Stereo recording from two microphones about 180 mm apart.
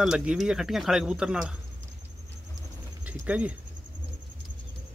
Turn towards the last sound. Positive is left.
turn(degrees=-5)  # may be behind; listen again after turning